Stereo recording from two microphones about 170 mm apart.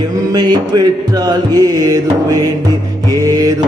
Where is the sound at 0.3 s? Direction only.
25° right (ahead or behind).